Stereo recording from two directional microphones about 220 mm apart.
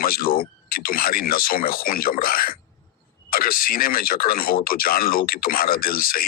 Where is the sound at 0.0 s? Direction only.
40° left (ahead or behind).